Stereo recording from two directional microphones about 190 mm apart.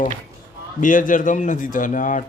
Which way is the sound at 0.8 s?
45° left (ahead or behind).